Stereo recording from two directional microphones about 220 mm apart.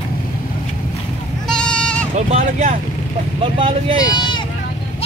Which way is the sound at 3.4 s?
25° right (ahead or behind).